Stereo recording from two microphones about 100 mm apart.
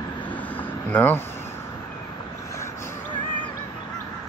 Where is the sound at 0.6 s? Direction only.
20° left (ahead or behind).